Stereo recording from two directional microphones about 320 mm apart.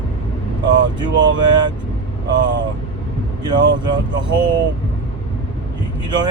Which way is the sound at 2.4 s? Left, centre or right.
Right.